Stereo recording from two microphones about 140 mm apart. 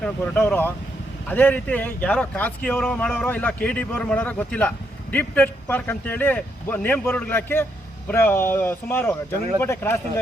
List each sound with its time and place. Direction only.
0.0 s a man's voice: 10° left (ahead or behind)